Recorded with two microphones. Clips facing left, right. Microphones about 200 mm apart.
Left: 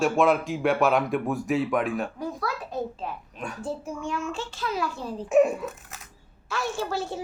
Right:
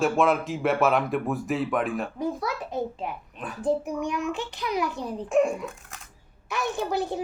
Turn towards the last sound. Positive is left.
turn(degrees=-15)  # may be behind; listen again after turning